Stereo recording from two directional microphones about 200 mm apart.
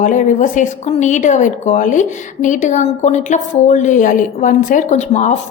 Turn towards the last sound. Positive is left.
turn(degrees=35)  # may be behind; listen again after turning